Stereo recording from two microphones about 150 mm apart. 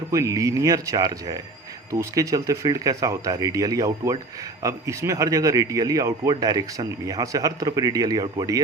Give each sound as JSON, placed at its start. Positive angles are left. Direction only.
{"t": 0.1, "sound": "speech", "side_deg": -20}